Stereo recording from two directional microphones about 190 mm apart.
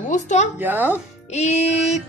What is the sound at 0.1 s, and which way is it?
Speech, 40° left (ahead or behind).